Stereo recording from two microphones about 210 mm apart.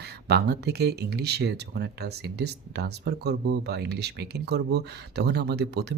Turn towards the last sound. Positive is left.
turn(degrees=-50)  # may be behind; listen again after turning